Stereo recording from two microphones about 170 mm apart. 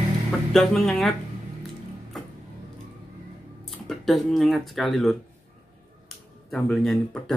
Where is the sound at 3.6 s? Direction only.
Centre (ahead or behind).